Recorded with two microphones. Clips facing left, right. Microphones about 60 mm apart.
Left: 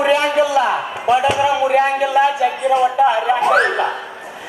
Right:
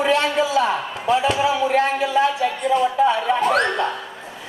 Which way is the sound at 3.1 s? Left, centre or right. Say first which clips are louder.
Left 4 dB; centre.